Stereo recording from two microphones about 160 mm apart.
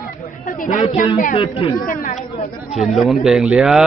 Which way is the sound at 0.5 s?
55° left (ahead or behind).